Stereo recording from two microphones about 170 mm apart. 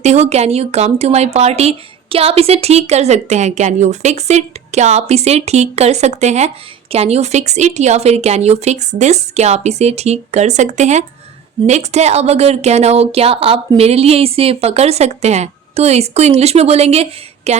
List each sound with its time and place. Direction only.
0.0 s speech: 40° right (ahead or behind)